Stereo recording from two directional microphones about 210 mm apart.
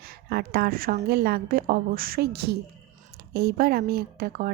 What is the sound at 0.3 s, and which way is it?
Speech, 50° right (ahead or behind).